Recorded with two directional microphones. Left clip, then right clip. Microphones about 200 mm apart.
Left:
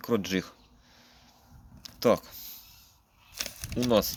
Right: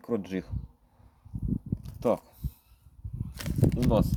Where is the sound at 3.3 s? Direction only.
25° right (ahead or behind).